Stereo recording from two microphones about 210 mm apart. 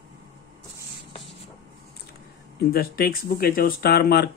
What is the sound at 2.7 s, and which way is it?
Speech, 45° left (ahead or behind).